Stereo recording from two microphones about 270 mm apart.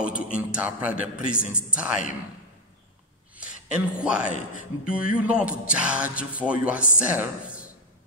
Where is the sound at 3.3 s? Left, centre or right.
Centre.